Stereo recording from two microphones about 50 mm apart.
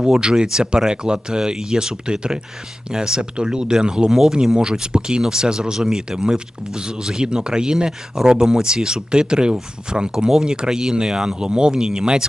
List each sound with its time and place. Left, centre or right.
0.0 s speech: centre